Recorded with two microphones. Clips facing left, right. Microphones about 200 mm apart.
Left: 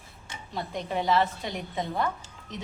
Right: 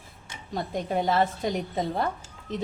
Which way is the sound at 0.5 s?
45° right (ahead or behind).